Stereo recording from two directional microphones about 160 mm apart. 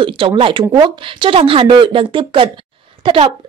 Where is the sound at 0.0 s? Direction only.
30° right (ahead or behind).